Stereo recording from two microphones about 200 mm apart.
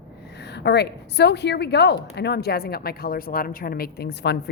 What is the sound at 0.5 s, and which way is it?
A woman's voice, 55° left (ahead or behind).